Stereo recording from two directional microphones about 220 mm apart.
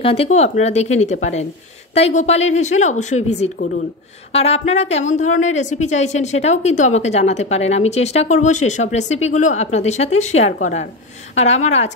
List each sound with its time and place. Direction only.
0.0 s a woman's voice: 25° left (ahead or behind)
4.3 s a woman's voice: 30° left (ahead or behind)